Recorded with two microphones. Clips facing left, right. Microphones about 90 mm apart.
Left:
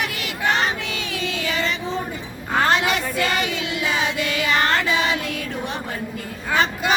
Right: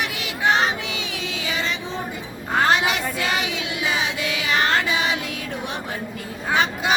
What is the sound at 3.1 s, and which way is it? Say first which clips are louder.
Child singing: left 2 dB; 45° left (ahead or behind).